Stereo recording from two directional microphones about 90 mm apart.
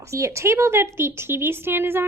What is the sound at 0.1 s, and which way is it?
A woman's voice, 35° right (ahead or behind).